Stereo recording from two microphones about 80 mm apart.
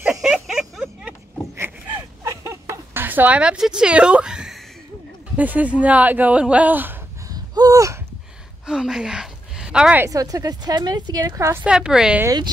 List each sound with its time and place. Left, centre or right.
0.1 s a sound: centre
1.6 s a sound: right; by 4.6 s centre
5.3 s speech: centre
7.2 s gasp: right
8.6 s speech: centre
10.0 s a woman's voice: right
11.3 s a woman's voice: right
11.6 s a woman's voice: centre